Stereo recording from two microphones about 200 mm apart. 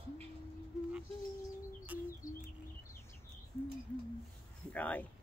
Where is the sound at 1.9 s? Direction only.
10° right (ahead or behind).